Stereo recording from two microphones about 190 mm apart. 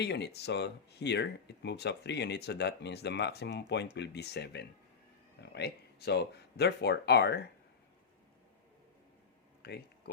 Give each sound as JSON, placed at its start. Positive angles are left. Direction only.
{"t": 0.0, "sound": "speech", "side_deg": 65}
{"t": 9.6, "sound": "speech", "side_deg": 55}